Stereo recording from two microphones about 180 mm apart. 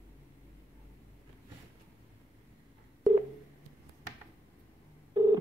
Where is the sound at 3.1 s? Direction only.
5° right (ahead or behind).